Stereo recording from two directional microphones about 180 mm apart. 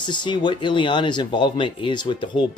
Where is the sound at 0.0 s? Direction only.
25° left (ahead or behind).